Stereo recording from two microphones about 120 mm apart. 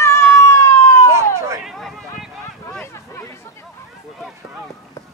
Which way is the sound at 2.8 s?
20° left (ahead or behind).